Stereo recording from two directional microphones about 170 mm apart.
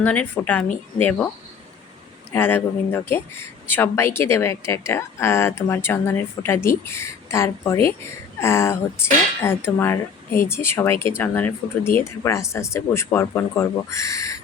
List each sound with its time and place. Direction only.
0.0 s speech: 10° left (ahead or behind)
2.3 s speech: 15° left (ahead or behind)